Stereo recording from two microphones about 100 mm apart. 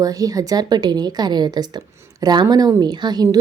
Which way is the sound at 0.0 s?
35° right (ahead or behind).